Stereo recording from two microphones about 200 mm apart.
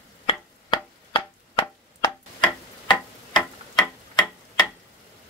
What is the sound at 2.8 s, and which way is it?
Tick-tock, 20° left (ahead or behind).